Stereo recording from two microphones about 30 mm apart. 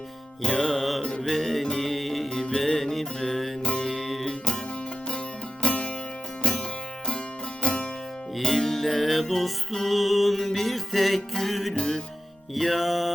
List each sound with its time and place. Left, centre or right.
0.4 s music: centre
0.8 s music: centre
1.2 s music: centre
2.3 s music: left; by 4.3 s centre
5.6 s music: left
8.4 s music: centre
11.7 s music: left
12.5 s music: centre